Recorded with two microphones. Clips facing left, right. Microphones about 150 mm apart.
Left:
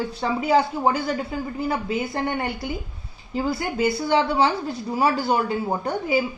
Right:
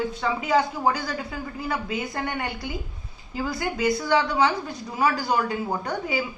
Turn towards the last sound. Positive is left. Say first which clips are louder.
# left 4 dB
turn(degrees=25)  # may be behind; listen again after turning